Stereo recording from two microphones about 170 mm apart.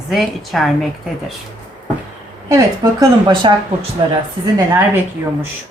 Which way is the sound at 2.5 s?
20° right (ahead or behind).